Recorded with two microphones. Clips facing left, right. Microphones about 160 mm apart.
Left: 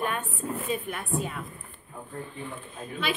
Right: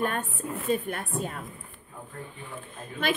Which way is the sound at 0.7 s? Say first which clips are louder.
Right 6 dB; 45° right (ahead or behind).